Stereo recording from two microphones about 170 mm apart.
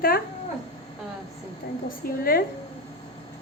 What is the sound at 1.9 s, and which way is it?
Speech, 60° left (ahead or behind).